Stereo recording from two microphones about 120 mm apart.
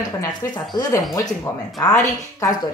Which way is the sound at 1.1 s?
30° left (ahead or behind).